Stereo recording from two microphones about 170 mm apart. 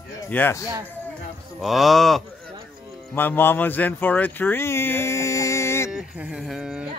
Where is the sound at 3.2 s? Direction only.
10° left (ahead or behind).